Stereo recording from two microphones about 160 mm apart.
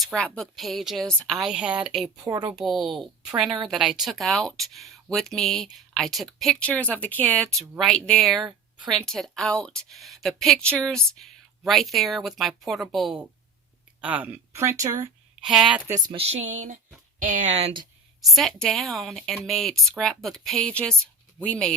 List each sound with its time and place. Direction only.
0.0 s speech: 5° left (ahead or behind)
2.2 s a woman's voice: 20° right (ahead or behind)
2.6 s speech: centre (ahead or behind); by 15.1 s 20° right (ahead or behind)
15.4 s speech: 5° right (ahead or behind)
15.9 s a woman's voice: 25° right (ahead or behind)
16.1 s speech: 40° right (ahead or behind)
18.3 s speech: centre (ahead or behind)